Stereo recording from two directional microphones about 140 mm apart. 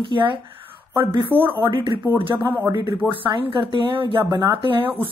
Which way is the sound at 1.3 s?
10° right (ahead or behind).